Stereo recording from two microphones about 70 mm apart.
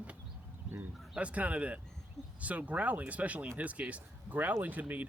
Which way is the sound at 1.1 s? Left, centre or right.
Centre.